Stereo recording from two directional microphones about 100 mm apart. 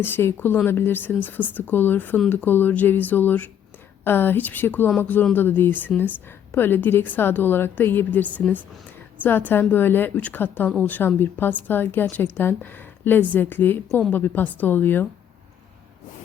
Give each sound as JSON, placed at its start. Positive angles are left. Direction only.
{"t": 0.0, "sound": "a woman's voice", "side_deg": 25}